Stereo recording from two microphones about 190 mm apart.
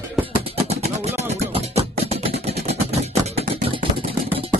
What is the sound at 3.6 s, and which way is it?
Vehicle, 30° right (ahead or behind).